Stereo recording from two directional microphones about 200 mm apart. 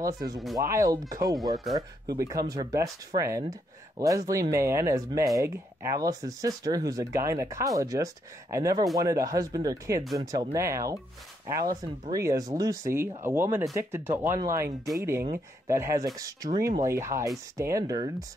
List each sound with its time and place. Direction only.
0.0 s speech: 20° right (ahead or behind)